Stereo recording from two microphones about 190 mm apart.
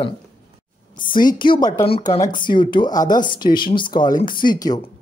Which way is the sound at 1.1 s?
25° left (ahead or behind).